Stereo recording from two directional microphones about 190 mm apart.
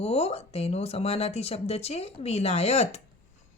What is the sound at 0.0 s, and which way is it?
Speech, 30° left (ahead or behind).